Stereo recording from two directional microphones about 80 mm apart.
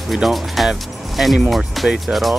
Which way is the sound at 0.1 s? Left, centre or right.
Centre.